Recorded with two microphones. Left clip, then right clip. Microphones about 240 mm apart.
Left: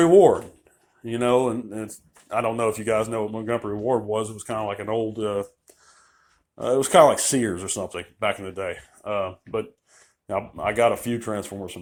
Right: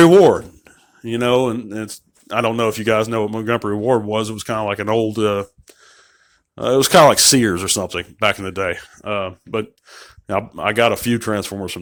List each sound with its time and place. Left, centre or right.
0.0 s speech: right
1.1 s speech: right